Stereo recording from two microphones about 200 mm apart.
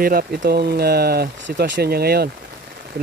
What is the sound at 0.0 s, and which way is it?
Speech, 45° right (ahead or behind).